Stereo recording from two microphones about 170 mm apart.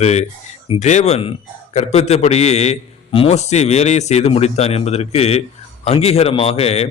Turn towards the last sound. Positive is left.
turn(degrees=40)  # may be behind; listen again after turning